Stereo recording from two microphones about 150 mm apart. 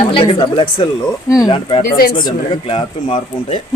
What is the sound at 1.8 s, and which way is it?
Speech, 75° left (ahead or behind).